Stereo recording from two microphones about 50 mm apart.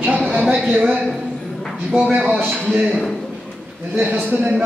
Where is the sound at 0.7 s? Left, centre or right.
Right.